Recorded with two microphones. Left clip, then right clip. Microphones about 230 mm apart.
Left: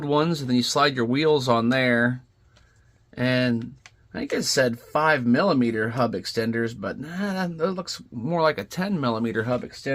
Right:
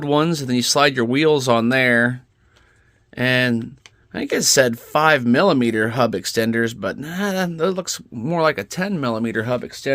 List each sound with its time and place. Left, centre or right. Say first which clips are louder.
0.0 s speech: right 4 dB; right
3.2 s speech: right 5 dB; right